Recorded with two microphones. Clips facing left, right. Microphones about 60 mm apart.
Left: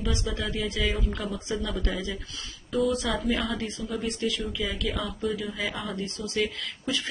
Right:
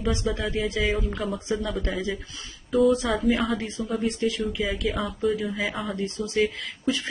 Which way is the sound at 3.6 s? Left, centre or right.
Right.